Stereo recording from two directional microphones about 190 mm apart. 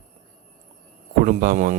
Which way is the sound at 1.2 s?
45° right (ahead or behind).